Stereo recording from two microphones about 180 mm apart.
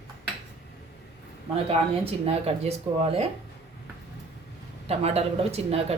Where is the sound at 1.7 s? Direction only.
35° right (ahead or behind).